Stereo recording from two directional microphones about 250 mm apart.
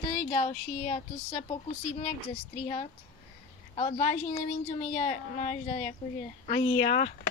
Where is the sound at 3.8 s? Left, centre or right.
Left.